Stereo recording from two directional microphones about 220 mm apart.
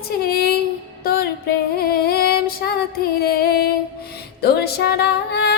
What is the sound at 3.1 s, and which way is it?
Female singing, 45° left (ahead or behind).